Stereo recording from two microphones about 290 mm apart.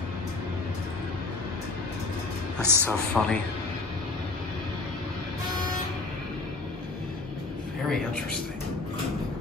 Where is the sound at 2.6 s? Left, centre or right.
Centre.